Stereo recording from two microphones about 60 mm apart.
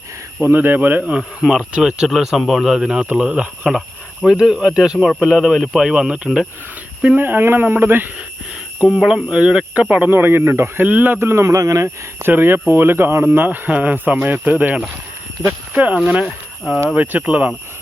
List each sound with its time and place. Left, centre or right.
0.4 s speech: right
1.1 s speech: centre
3.7 s speech: centre
7.2 s speech: right
9.0 s speech: centre
10.1 s speech: right
10.8 s speech: right
11.2 s speech: right
12.2 s speech: right
16.2 s speech: centre
17.0 s speech: right